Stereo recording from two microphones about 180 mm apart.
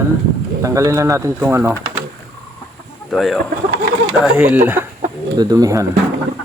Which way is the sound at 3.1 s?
Centre (ahead or behind).